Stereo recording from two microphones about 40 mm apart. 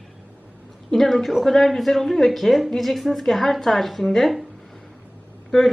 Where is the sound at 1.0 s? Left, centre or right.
Centre.